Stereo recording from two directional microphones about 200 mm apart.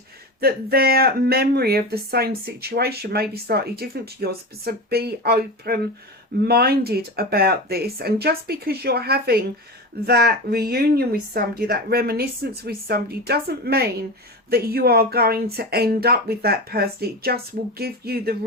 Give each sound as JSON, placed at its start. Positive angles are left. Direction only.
{"t": 0.3, "sound": "speech", "side_deg": -50}